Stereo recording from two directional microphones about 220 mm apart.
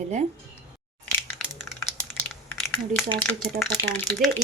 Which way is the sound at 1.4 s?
Centre (ahead or behind).